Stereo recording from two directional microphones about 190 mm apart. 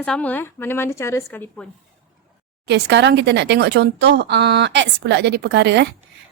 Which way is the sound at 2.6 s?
60° right (ahead or behind).